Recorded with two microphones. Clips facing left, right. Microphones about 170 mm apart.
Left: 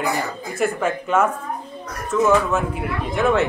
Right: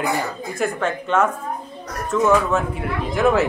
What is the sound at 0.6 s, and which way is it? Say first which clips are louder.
A woman's voice: left 2 dB; 5° left (ahead or behind).